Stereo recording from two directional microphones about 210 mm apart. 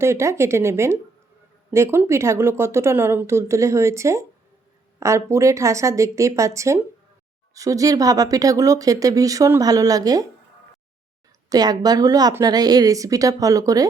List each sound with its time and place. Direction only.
0.0 s speech: 15° right (ahead or behind)
11.4 s speech: 20° right (ahead or behind)